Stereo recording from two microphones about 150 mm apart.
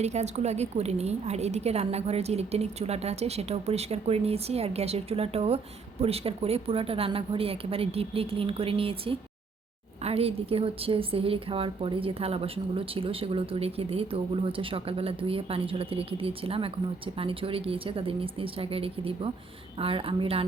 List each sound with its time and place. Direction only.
0.0 s a woman's voice: 45° right (ahead or behind)